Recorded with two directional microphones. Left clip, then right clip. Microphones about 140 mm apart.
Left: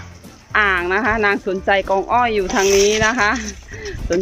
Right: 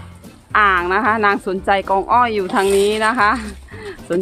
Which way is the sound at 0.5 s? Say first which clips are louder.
Right 2 dB; 15° right (ahead or behind).